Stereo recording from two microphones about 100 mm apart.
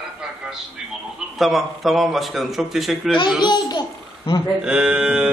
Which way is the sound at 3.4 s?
45° left (ahead or behind).